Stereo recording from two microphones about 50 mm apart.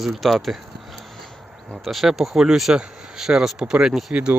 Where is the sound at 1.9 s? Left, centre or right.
Centre.